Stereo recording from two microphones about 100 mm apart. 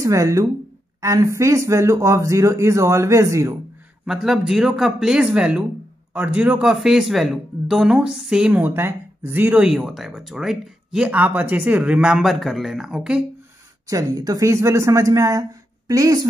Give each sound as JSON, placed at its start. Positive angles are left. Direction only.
{"t": 0.0, "sound": "speech", "side_deg": -30}
{"t": 4.0, "sound": "speech", "side_deg": -5}
{"t": 9.6, "sound": "speech", "side_deg": -5}
{"t": 13.8, "sound": "speech", "side_deg": -35}